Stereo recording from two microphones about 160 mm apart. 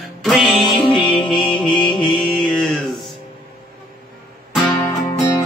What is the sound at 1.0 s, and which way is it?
Music, 30° left (ahead or behind).